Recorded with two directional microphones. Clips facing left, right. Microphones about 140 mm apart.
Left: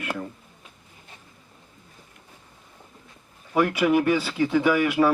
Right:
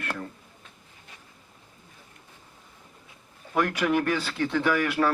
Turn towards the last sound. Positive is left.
turn(degrees=10)  # may be behind; listen again after turning